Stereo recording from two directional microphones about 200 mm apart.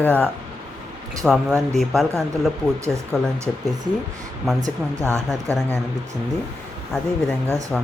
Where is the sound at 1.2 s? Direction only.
Centre (ahead or behind).